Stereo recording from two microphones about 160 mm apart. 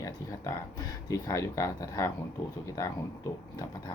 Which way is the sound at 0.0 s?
20° left (ahead or behind).